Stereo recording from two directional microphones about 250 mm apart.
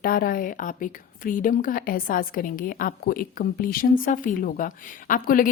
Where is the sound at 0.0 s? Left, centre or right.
Left.